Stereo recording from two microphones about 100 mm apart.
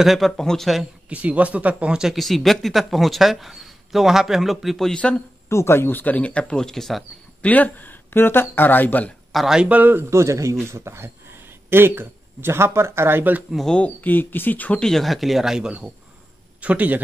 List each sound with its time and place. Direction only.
0.0 s speech: centre (ahead or behind)
1.0 s speech: 15° right (ahead or behind); by 5.2 s 10° left (ahead or behind)
5.5 s speech: 25° left (ahead or behind); by 7.1 s centre (ahead or behind)
7.4 s speech: 15° left (ahead or behind)
9.3 s speech: 5° right (ahead or behind); by 13.4 s 20° right (ahead or behind)
13.5 s a man's voice: 5° left (ahead or behind); by 17.0 s 15° right (ahead or behind)